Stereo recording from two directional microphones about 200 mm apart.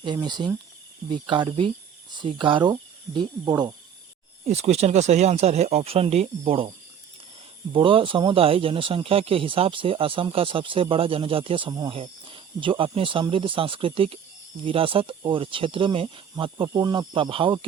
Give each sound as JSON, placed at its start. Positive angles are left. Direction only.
{"t": 0.0, "sound": "speech", "side_deg": -20}
{"t": 4.4, "sound": "speech", "side_deg": -35}
{"t": 7.7, "sound": "speech", "side_deg": -25}